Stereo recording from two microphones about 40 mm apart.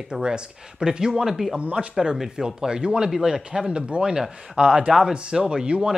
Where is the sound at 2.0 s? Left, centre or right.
Centre.